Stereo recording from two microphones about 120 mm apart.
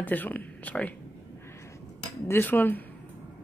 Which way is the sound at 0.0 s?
15° left (ahead or behind).